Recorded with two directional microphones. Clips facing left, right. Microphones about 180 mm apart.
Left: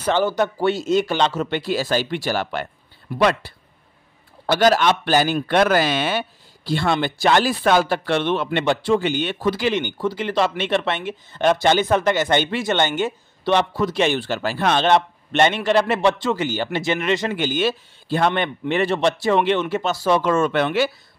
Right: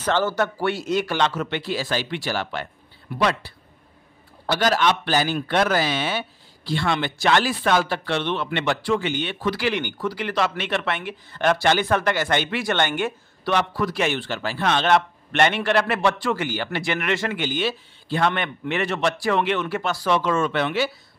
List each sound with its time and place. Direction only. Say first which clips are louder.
0.0 s a man's voice: left 3 dB; 15° left (ahead or behind); by 8.5 s 50° left (ahead or behind)
8.6 s speech: left 4 dB; 25° left (ahead or behind)
9.0 s speech: left 4 dB; 40° left (ahead or behind)
9.5 s speech: left 3 dB; 20° left (ahead or behind)
14.1 s speech: left 4 dB; 40° left (ahead or behind)
14.9 s speech: left 2 dB; 20° left (ahead or behind)
17.4 s speech: left 4 dB; 45° left (ahead or behind); by 20.1 s 20° left (ahead or behind)
20.1 s a man's voice: left 3 dB; 45° left (ahead or behind)